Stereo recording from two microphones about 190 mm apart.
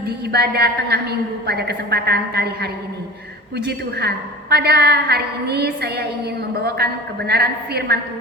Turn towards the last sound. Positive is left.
turn(degrees=-55)  # may be behind; listen again after turning